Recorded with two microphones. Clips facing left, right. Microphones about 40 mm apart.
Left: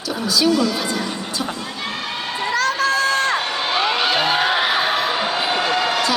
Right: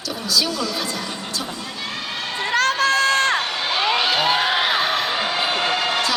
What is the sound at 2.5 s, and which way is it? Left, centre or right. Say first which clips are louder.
Crowd: right 1 dB; right.